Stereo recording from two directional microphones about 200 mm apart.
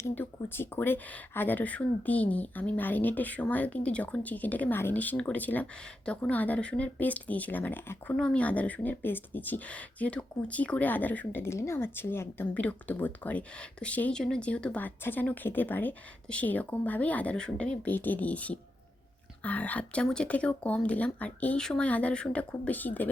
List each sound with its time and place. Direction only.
0.1 s speech: 10° left (ahead or behind)